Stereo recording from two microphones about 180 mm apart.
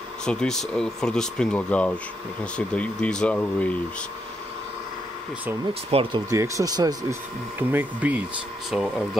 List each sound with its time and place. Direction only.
0.2 s speech: 5° left (ahead or behind)
5.9 s speech: 35° right (ahead or behind)
6.3 s speech: 15° right (ahead or behind)
7.7 s speech: 10° right (ahead or behind)